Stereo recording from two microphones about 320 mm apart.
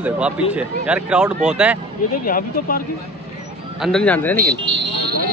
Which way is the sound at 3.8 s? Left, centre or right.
Centre.